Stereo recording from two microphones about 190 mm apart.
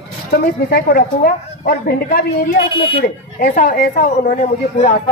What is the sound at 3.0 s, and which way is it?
A woman's voice, 50° left (ahead or behind).